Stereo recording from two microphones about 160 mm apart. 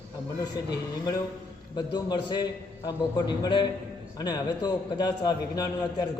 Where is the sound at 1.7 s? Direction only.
25° left (ahead or behind).